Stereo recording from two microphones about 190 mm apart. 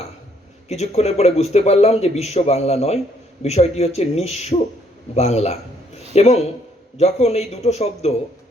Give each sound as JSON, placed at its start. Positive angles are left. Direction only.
{"t": 0.7, "sound": "a man's voice", "side_deg": 35}